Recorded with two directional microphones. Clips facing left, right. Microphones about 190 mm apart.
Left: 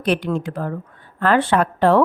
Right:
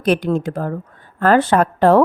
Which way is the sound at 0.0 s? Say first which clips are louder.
Right 3 dB; 45° right (ahead or behind).